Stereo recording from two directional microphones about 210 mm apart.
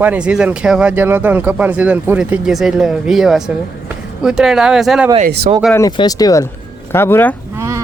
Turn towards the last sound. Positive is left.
turn(degrees=-15)  # may be behind; listen again after turning